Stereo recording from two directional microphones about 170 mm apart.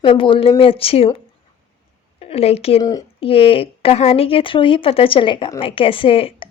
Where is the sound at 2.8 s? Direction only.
20° left (ahead or behind).